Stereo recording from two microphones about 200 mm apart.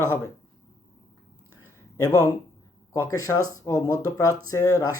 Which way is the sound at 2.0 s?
15° left (ahead or behind).